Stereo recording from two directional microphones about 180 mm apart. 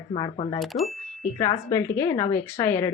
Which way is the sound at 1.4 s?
20° left (ahead or behind).